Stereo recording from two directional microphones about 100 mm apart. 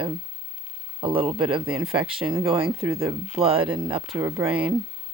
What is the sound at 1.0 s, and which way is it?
Speech, 60° right (ahead or behind).